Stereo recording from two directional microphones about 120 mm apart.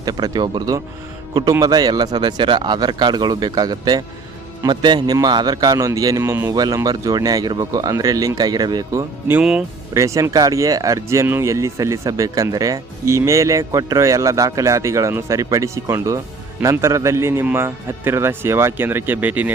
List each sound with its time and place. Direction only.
0.0 s speech: 35° right (ahead or behind)
9.4 s speech: 5° right (ahead or behind)
9.9 s speech: 25° right (ahead or behind)